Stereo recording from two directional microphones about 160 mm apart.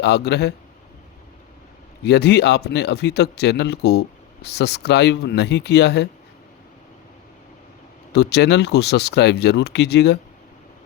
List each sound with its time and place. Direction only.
0.0 s speech: 90° left
2.0 s speech: 90° left
8.1 s speech: 90° left